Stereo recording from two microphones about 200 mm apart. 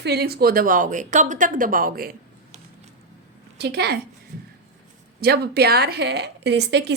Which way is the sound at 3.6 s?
55° right (ahead or behind).